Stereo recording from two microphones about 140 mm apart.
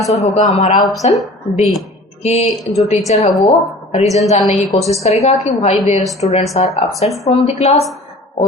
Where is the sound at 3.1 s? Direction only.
50° left (ahead or behind).